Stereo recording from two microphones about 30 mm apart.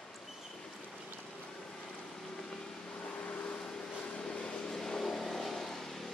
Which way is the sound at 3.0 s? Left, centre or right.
Left.